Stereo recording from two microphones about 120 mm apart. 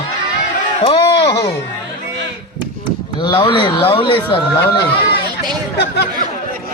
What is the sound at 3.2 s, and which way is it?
Speech, 45° left (ahead or behind).